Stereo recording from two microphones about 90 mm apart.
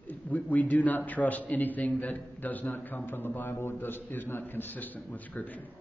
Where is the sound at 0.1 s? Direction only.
15° left (ahead or behind).